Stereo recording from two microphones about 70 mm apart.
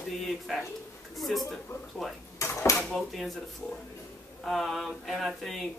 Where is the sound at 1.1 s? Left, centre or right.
Centre.